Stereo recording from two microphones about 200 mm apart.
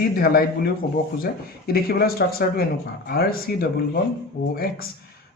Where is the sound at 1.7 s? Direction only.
50° left (ahead or behind).